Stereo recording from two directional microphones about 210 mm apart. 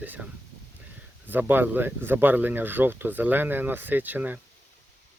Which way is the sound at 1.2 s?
10° right (ahead or behind).